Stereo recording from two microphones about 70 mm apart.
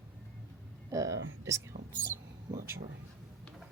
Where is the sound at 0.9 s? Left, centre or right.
Right.